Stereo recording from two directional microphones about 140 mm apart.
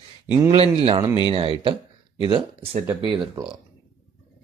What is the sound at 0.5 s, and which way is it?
Speech, 45° right (ahead or behind).